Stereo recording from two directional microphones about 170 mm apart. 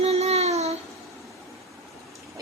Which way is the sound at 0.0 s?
40° right (ahead or behind).